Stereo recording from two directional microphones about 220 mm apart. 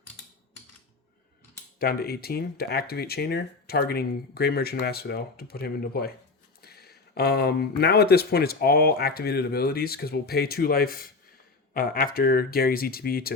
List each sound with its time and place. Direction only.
1.8 s speech: 45° left (ahead or behind)